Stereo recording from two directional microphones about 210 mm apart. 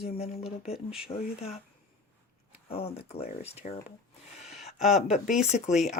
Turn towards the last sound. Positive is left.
turn(degrees=40)  # may be behind; listen again after turning